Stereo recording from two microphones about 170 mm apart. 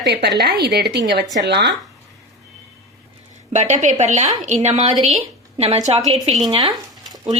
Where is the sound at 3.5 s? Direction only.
45° right (ahead or behind).